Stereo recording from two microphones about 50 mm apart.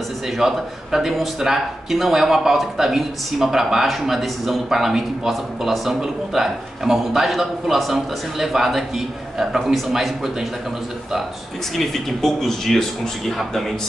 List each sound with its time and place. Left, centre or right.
0.4 s speech: centre
11.7 s speech: centre